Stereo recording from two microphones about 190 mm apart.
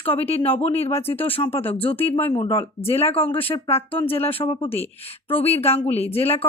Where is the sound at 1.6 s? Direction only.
10° left (ahead or behind).